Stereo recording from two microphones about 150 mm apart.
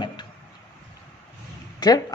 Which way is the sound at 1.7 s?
25° left (ahead or behind).